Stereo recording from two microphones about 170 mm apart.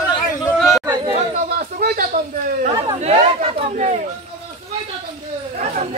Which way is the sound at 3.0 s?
35° right (ahead or behind).